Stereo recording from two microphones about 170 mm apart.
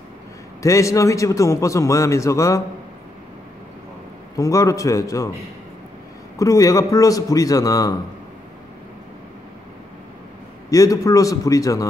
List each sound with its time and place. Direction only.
0.6 s a man's voice: 20° left (ahead or behind)
4.4 s a man's voice: 20° left (ahead or behind)
6.3 s a man's voice: 20° left (ahead or behind)
10.7 s a man's voice: 20° left (ahead or behind)